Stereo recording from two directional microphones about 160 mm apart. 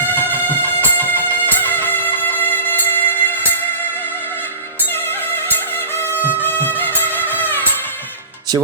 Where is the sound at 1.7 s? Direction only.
10° left (ahead or behind).